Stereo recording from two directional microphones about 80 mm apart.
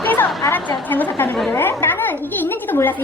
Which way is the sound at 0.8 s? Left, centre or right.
Left.